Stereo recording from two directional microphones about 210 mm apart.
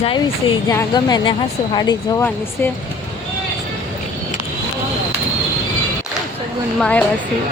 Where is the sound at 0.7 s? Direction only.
15° left (ahead or behind).